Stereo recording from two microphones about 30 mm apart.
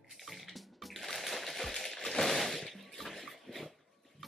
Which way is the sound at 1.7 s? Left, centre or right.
Centre.